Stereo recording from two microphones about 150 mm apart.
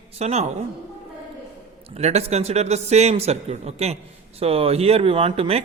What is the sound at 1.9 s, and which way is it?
A man's voice, 45° right (ahead or behind).